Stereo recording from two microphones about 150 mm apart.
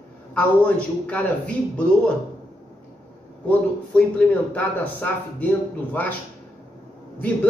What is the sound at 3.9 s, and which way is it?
A man's voice, 10° left (ahead or behind).